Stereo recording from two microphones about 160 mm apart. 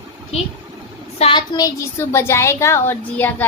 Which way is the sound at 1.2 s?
40° left (ahead or behind).